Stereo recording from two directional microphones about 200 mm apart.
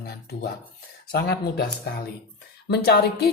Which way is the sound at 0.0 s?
50° left (ahead or behind).